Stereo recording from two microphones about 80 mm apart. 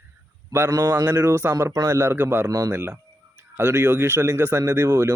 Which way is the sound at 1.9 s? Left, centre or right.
Right.